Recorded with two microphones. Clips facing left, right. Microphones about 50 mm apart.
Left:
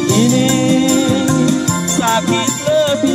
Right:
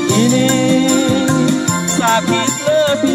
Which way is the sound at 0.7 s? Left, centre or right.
Left.